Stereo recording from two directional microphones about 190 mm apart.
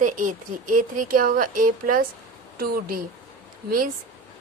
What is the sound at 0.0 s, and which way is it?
Speech, 45° right (ahead or behind).